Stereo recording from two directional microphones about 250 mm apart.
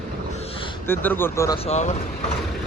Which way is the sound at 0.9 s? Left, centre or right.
Centre.